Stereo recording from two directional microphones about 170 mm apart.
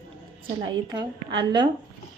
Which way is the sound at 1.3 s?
25° right (ahead or behind).